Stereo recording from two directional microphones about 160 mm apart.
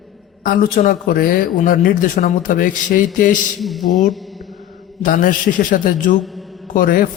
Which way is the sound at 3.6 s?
Centre (ahead or behind).